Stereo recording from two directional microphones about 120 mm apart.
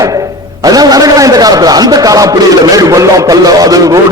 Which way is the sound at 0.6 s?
30° right (ahead or behind).